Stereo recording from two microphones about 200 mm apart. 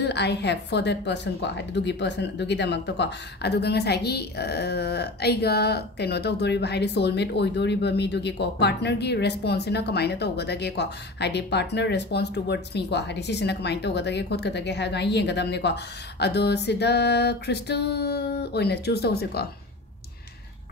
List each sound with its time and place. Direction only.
0.0 s a woman's voice: 55° left (ahead or behind)